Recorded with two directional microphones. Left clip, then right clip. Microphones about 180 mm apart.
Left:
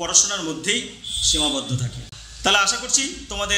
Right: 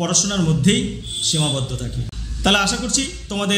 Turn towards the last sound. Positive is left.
turn(degrees=-5)  # may be behind; listen again after turning